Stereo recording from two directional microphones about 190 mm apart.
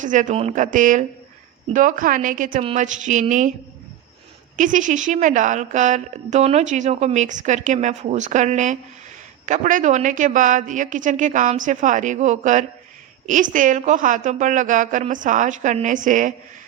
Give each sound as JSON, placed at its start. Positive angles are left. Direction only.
{"t": 0.0, "sound": "a woman's voice", "side_deg": -40}
{"t": 4.5, "sound": "a woman's voice", "side_deg": -40}